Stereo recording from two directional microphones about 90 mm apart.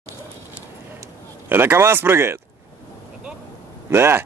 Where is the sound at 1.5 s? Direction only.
25° right (ahead or behind).